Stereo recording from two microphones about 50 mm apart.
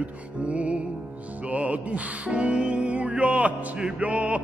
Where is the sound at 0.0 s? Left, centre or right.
Right.